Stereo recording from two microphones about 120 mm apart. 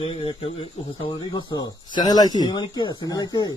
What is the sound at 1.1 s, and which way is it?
Speech, 35° left (ahead or behind).